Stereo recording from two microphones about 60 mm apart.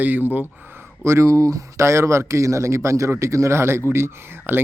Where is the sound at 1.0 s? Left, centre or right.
Right.